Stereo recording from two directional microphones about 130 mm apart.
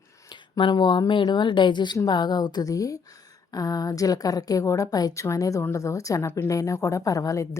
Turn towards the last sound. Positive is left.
turn(degrees=25)  # may be behind; listen again after turning